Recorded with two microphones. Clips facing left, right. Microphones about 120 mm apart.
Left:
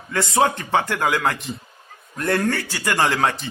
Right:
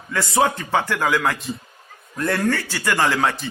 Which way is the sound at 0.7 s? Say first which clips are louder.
Even; 40° left (ahead or behind).